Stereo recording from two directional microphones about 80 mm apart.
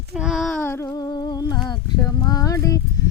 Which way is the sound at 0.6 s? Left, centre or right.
Left.